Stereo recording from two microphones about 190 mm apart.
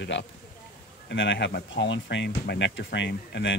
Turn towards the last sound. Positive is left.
turn(degrees=65)  # may be behind; listen again after turning